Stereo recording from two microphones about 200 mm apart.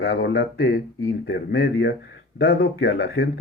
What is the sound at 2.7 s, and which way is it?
Speech, 60° left (ahead or behind).